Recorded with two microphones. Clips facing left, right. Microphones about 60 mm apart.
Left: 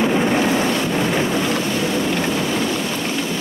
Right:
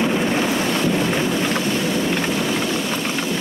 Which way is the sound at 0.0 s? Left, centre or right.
Centre.